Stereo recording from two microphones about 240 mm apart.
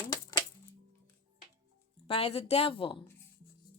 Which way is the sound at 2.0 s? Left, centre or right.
Left.